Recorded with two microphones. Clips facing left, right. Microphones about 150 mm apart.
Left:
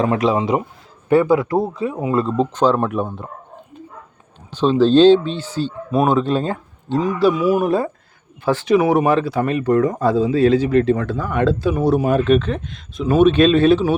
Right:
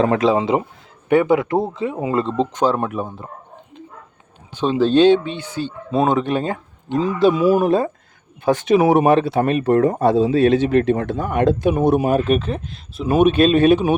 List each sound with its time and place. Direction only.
0.0 s a man's voice: 35° right (ahead or behind); by 2.9 s 15° right (ahead or behind)
2.9 s speech: centre (ahead or behind)
4.5 s speech: 10° right (ahead or behind)
5.9 s speech: 25° right (ahead or behind)
7.0 s a man's voice: 25° right (ahead or behind)
12.1 s speech: 10° right (ahead or behind)